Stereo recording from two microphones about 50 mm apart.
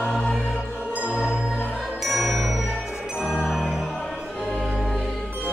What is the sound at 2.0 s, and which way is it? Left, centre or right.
Music, centre.